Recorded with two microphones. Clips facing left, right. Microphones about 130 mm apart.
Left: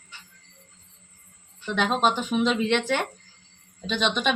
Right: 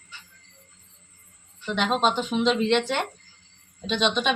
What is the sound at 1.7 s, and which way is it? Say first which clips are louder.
Speech: even; 5° left (ahead or behind).